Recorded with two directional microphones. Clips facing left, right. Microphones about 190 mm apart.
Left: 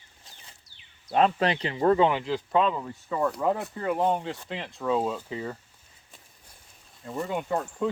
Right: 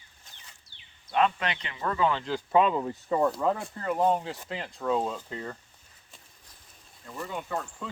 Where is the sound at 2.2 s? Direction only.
Centre (ahead or behind).